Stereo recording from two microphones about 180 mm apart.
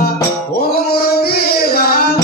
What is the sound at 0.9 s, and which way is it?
Singing, 60° left (ahead or behind).